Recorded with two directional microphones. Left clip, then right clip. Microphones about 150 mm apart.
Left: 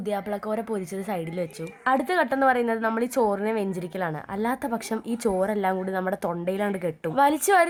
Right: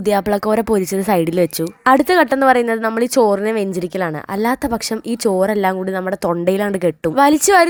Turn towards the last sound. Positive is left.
turn(degrees=-30)  # may be behind; listen again after turning